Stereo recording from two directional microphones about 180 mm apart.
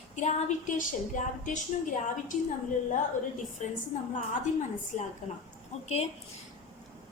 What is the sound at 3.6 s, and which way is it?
Speech, 45° left (ahead or behind).